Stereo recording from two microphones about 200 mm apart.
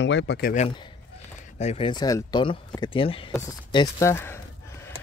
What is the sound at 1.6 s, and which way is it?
Speech, 30° left (ahead or behind).